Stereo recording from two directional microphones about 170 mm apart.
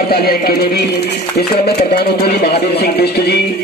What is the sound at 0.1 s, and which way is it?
Speech, 65° left (ahead or behind).